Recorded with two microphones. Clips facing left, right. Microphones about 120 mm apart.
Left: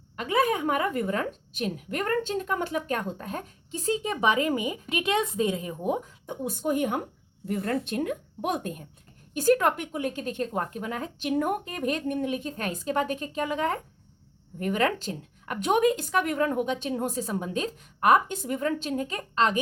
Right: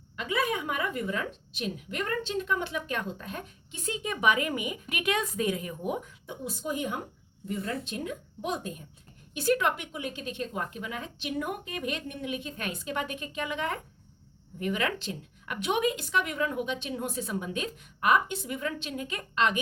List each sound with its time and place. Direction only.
0.2 s a woman's voice: 45° left (ahead or behind); by 6.1 s 30° left (ahead or behind)
6.2 s a woman's voice: 55° left (ahead or behind)
9.3 s a woman's voice: 45° left (ahead or behind)